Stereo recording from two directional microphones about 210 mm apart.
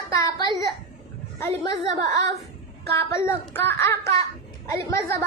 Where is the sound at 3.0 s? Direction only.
10° left (ahead or behind).